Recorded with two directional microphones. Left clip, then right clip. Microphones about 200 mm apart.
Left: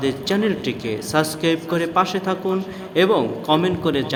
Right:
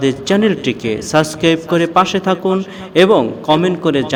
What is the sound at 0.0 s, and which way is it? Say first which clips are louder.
A man's voice: right 7 dB; 35° right (ahead or behind).